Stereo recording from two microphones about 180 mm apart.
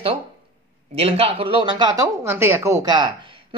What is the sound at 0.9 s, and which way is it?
Speech, 30° right (ahead or behind).